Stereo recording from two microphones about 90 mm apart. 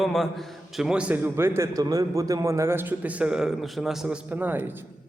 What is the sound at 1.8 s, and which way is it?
A man's voice, 40° right (ahead or behind).